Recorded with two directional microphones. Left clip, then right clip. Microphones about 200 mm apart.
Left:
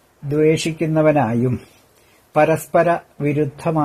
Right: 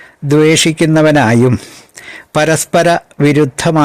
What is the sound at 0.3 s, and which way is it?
Speech, 45° right (ahead or behind).